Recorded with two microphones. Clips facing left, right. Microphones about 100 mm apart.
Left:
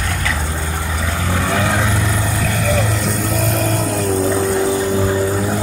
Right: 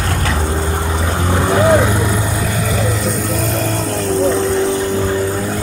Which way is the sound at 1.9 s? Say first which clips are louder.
Right 3 dB; 20° right (ahead or behind).